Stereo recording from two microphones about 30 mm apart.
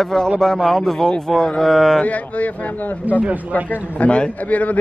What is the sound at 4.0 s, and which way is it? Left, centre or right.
Speech, left.